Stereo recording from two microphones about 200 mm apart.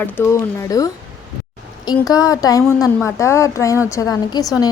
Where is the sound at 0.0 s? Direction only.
10° left (ahead or behind).